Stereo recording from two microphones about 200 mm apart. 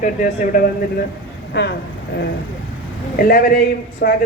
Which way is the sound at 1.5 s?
60° left (ahead or behind).